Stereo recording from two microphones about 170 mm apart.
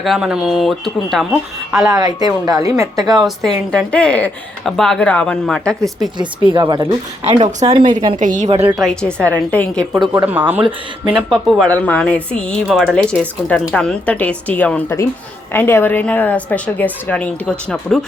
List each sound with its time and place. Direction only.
0.0 s speech: centre (ahead or behind)
1.9 s speech: 20° right (ahead or behind)
3.2 s speech: centre (ahead or behind)
6.1 s speech: 25° right (ahead or behind)
7.4 s a woman's voice: 40° right (ahead or behind)
8.7 s speech: centre (ahead or behind)
10.2 s a woman's voice: 10° right (ahead or behind); by 18.0 s 5° left (ahead or behind)